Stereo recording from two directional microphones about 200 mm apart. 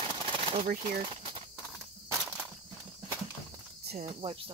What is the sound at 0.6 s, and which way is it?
Speech, 50° right (ahead or behind).